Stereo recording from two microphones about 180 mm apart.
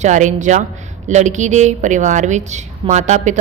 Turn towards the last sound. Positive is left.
turn(degrees=-40)  # may be behind; listen again after turning